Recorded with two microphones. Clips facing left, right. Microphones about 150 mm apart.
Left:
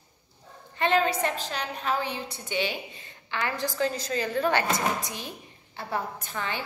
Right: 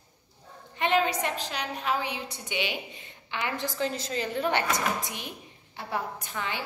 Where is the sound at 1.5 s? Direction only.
15° right (ahead or behind).